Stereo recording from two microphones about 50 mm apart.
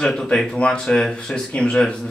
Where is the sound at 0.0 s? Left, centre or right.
Centre.